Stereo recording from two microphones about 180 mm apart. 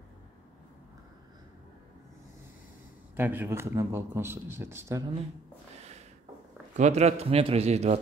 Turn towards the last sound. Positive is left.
turn(degrees=-35)  # may be behind; listen again after turning